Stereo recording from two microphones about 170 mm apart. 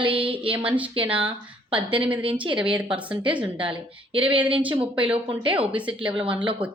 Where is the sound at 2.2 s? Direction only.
30° right (ahead or behind).